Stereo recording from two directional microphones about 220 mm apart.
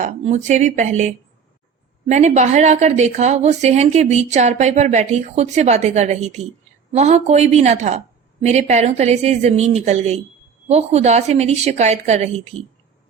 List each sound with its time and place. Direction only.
0.0 s a woman's voice: 30° right (ahead or behind)